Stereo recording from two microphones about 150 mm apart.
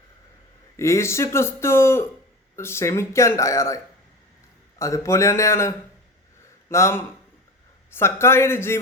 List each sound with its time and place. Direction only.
0.8 s speech: 20° left (ahead or behind)
4.8 s speech: 20° left (ahead or behind)